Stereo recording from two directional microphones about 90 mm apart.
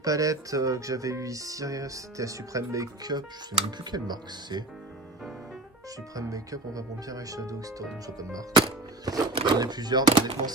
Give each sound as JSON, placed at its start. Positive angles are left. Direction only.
{"t": 0.0, "sound": "speech", "side_deg": -40}
{"t": 6.1, "sound": "speech", "side_deg": -40}